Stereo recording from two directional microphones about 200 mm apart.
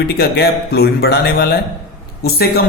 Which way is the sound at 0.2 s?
55° left (ahead or behind).